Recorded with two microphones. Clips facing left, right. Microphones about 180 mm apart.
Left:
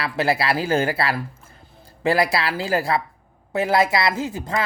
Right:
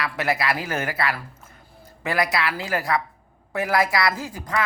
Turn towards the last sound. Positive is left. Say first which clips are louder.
# left 2 dB
turn(degrees=25)  # may be behind; listen again after turning